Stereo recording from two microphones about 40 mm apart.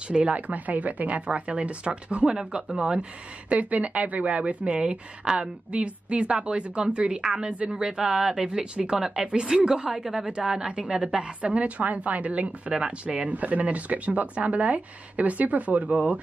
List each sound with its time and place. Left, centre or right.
0.1 s speech: right
2.2 s a woman's voice: centre
9.9 s speech: centre
10.8 s a woman's voice: right